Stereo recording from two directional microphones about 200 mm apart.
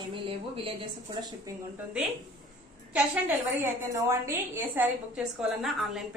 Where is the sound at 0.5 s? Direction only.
25° right (ahead or behind).